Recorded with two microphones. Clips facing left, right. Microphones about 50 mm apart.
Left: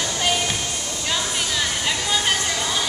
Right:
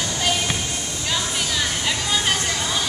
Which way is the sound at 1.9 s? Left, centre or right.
Centre.